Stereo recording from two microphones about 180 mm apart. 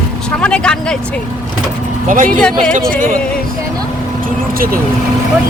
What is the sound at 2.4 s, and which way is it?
Speech, 5° left (ahead or behind).